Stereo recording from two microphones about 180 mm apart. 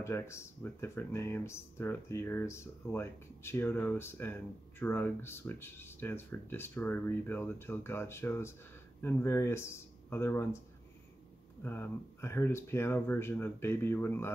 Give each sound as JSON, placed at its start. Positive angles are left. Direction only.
{"t": 0.0, "sound": "speech", "side_deg": 15}
{"t": 11.6, "sound": "speech", "side_deg": 10}